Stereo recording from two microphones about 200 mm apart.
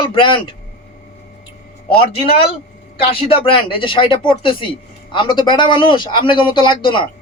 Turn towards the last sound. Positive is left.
turn(degrees=25)  # may be behind; listen again after turning